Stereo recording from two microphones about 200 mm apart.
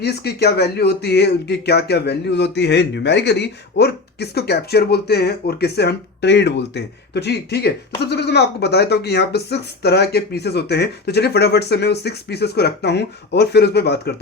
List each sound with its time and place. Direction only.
0.0 s speech: 55° left (ahead or behind)